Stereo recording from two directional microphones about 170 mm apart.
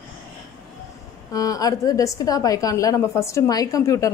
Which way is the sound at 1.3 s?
20° left (ahead or behind).